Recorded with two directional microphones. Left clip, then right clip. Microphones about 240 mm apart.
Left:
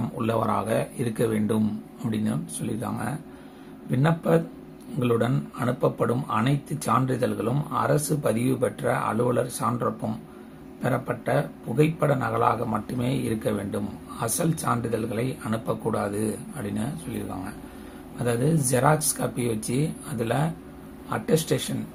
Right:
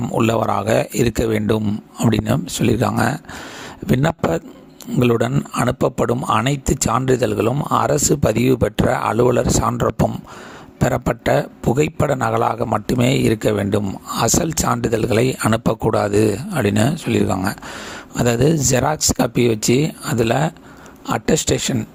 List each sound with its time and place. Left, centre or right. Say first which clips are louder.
0.2 s speech: right 7 dB; right